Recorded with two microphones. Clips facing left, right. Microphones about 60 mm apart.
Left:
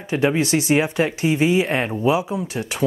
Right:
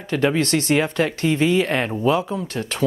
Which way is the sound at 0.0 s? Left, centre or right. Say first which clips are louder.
Even; centre.